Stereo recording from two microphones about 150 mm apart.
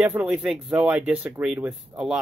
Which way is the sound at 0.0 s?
5° right (ahead or behind).